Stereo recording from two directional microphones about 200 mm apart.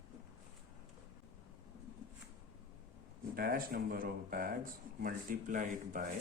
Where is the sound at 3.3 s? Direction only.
50° right (ahead or behind).